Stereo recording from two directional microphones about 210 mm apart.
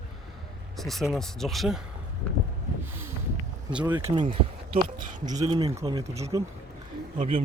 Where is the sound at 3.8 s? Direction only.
15° right (ahead or behind).